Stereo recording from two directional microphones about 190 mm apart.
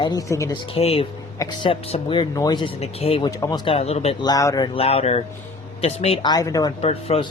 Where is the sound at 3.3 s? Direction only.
20° left (ahead or behind).